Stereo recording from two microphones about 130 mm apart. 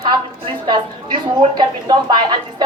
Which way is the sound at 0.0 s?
35° right (ahead or behind).